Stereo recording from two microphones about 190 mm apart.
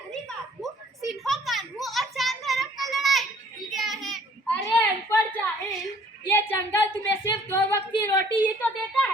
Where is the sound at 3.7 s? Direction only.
Centre (ahead or behind).